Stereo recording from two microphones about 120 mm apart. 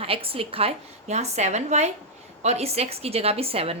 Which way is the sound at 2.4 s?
60° right (ahead or behind).